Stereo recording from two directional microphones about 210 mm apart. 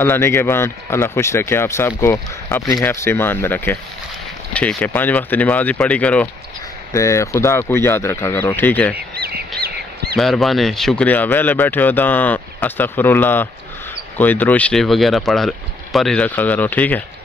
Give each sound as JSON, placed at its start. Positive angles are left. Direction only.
{"t": 0.0, "sound": "speech", "side_deg": 10}
{"t": 9.1, "sound": "bird", "side_deg": -50}
{"t": 10.1, "sound": "speech", "side_deg": 0}